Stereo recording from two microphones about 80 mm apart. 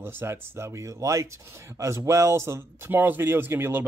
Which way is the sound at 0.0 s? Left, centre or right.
Right.